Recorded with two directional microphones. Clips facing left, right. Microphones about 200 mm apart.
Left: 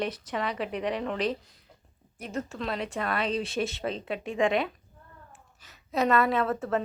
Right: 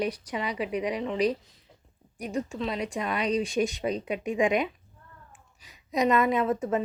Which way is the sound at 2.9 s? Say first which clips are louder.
Right 2 dB; 15° right (ahead or behind).